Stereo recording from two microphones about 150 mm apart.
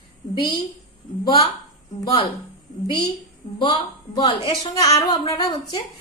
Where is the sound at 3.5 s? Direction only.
30° left (ahead or behind).